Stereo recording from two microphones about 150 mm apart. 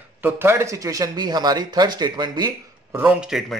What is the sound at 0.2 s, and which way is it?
A man's voice, 15° right (ahead or behind).